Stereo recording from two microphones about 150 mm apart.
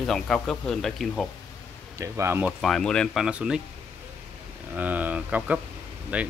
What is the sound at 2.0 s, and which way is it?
Speech, 15° right (ahead or behind).